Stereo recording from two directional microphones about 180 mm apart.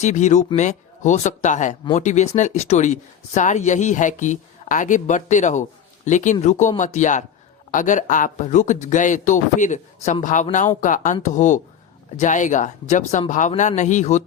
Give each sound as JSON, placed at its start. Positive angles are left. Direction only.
{"t": 0.0, "sound": "speech", "side_deg": 40}